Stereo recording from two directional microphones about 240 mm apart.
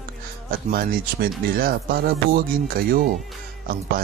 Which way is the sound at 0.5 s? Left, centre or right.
Right.